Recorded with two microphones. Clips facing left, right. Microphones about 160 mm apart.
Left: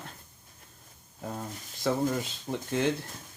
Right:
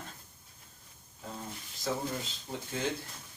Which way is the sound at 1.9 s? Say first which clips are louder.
Left 6 dB; 70° left (ahead or behind).